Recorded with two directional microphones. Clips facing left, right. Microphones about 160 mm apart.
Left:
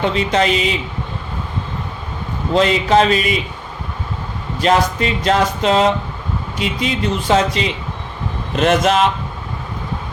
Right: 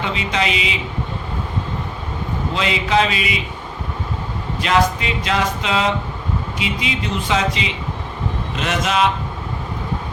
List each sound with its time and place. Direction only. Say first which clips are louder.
0.0 s speech: left 5 dB; 45° left (ahead or behind)
2.6 s speech: left 6 dB; 45° left (ahead or behind)
4.6 s speech: left 3 dB; 40° left (ahead or behind)